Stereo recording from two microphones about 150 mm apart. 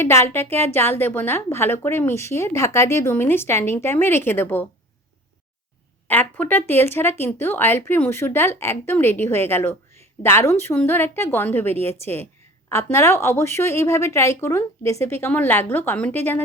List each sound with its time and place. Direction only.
0.0 s a woman's voice: 15° left (ahead or behind)
6.1 s a woman's voice: 10° left (ahead or behind)